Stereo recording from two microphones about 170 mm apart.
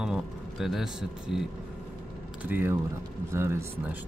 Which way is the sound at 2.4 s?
10° right (ahead or behind).